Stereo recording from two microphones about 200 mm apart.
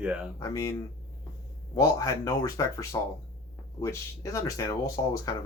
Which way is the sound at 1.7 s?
15° left (ahead or behind).